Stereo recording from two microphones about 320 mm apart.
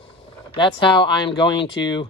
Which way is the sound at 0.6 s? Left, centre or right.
Centre.